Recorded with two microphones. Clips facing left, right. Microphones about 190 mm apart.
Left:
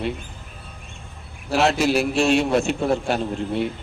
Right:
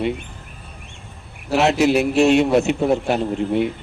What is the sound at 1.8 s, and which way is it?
Speech, 20° right (ahead or behind).